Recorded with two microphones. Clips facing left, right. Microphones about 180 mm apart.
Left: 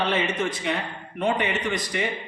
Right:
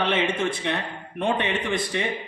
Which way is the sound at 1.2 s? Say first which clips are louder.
Even; 25° right (ahead or behind).